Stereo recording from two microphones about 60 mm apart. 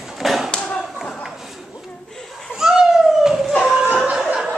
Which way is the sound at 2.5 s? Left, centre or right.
Centre.